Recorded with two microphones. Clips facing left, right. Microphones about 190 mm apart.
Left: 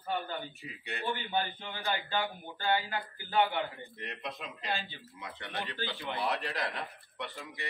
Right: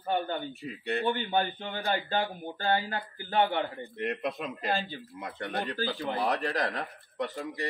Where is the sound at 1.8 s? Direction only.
40° right (ahead or behind).